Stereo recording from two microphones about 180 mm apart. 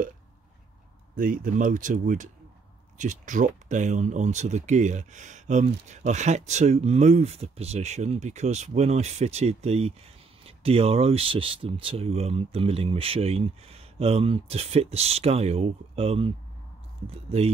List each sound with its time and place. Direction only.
1.1 s speech: 50° right (ahead or behind); by 17.5 s 35° right (ahead or behind)